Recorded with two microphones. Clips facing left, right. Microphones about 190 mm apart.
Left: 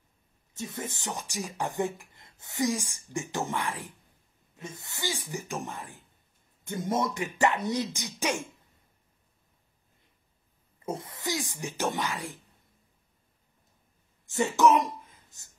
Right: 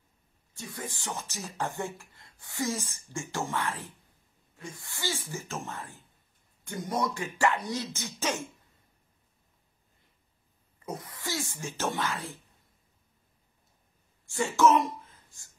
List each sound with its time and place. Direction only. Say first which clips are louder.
0.6 s a man's voice: left 3 dB; 20° left (ahead or behind)
10.9 s speech: left 3 dB; 25° left (ahead or behind)
14.2 s speech: left 1 dB; 20° left (ahead or behind)